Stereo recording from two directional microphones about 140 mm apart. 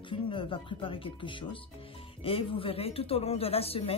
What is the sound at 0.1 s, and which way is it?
Speech, 35° left (ahead or behind).